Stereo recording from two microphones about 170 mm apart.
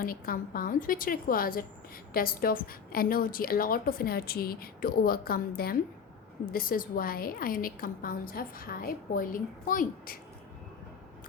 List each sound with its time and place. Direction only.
0.0 s a woman's voice: 60° left (ahead or behind)